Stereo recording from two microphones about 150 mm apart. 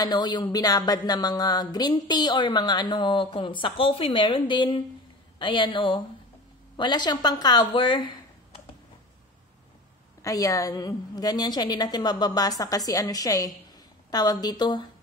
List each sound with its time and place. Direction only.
0.0 s a woman's voice: 30° left (ahead or behind)
10.2 s speech: 20° left (ahead or behind)